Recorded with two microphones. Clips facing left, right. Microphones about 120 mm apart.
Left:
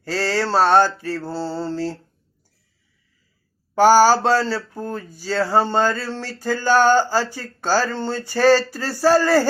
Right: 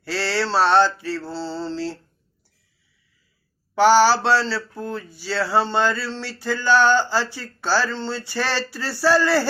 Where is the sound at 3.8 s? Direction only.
45° left (ahead or behind).